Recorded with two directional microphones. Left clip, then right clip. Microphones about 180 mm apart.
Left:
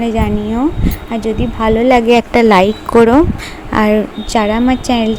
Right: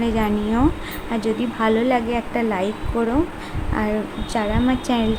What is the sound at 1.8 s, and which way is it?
A woman's voice, 45° left (ahead or behind).